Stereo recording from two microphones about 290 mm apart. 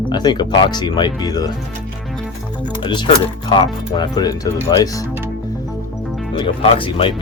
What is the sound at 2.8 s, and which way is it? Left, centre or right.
Speech, centre.